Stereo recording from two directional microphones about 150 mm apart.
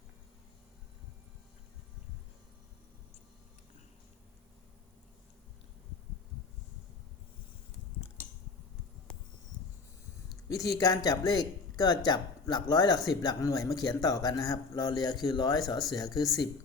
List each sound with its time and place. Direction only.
10.5 s a man's voice: 25° left (ahead or behind)